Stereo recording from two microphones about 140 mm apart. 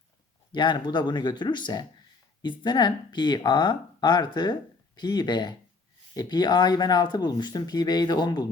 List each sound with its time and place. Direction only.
0.5 s speech: 35° left (ahead or behind)